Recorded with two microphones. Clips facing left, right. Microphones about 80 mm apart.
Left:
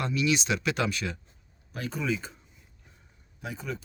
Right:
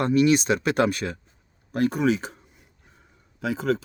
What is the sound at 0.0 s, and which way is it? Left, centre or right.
Speech, right.